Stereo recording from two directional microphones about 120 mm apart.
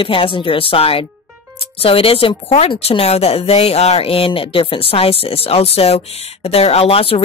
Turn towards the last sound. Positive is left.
turn(degrees=50)  # may be behind; listen again after turning